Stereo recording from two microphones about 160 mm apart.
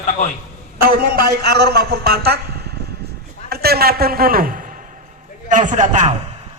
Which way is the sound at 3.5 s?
75° right (ahead or behind).